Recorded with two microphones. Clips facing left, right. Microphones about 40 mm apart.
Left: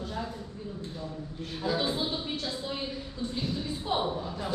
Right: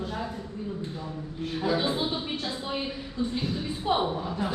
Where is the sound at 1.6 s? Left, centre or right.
Centre.